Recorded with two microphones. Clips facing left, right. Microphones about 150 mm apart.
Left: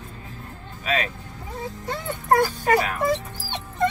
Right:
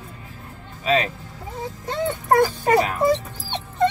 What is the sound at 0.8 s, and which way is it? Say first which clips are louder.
Vehicle: right 5 dB; 30° right (ahead or behind).